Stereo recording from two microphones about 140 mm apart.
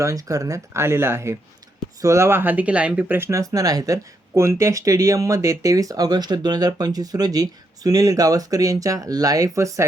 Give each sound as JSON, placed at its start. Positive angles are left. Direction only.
{"t": 0.0, "sound": "speech", "side_deg": -25}